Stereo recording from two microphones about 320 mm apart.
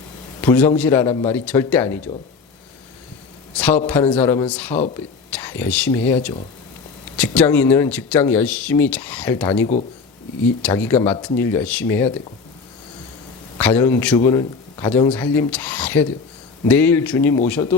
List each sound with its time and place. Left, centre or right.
0.4 s a man's voice: centre
3.6 s a man's voice: centre
7.2 s a man's voice: centre
13.6 s a man's voice: centre